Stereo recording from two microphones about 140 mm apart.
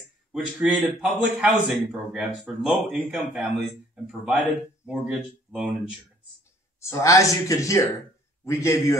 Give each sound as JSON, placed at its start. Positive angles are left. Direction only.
{"t": 0.3, "sound": "speech", "side_deg": -5}
{"t": 6.8, "sound": "speech", "side_deg": 20}